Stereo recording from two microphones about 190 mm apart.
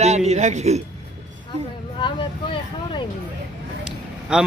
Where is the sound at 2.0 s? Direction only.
25° left (ahead or behind).